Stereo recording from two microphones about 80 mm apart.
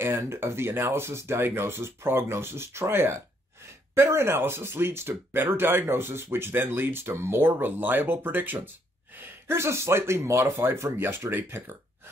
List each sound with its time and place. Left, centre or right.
0.0 s speech: right